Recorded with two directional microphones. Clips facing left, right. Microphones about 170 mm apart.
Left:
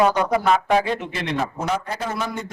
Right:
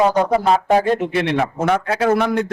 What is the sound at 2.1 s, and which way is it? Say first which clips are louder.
Speech: right 13 dB; 65° right (ahead or behind).